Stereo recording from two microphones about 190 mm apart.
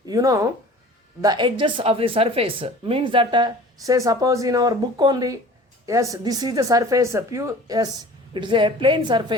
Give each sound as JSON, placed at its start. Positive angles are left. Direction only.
{"t": 0.0, "sound": "a woman's voice", "side_deg": -20}